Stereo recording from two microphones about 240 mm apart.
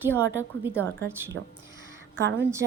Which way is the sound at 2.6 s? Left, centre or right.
Right.